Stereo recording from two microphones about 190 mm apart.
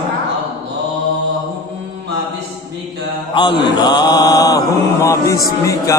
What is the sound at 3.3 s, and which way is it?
Mantra, 25° left (ahead or behind).